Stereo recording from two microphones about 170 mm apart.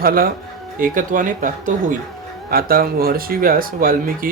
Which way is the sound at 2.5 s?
60° right (ahead or behind).